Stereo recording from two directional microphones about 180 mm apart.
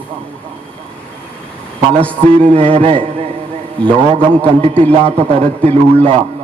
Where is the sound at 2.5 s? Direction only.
30° right (ahead or behind).